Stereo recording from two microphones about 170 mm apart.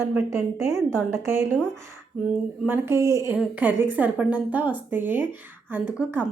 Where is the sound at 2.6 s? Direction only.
15° right (ahead or behind).